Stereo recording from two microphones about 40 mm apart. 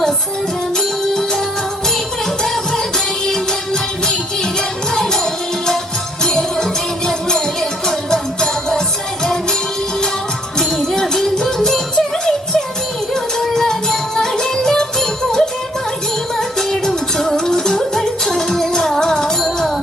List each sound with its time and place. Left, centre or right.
0.8 s music: centre
4.9 s music: centre
10.6 s music: centre
16.6 s music: centre